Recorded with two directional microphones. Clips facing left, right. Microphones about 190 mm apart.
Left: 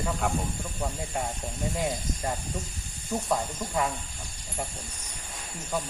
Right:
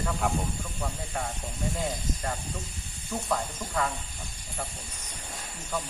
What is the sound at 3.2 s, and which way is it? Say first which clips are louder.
Speech: even; 15° left (ahead or behind).